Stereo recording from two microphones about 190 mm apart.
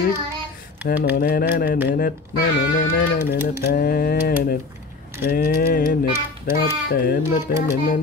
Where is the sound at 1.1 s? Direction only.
50° left (ahead or behind).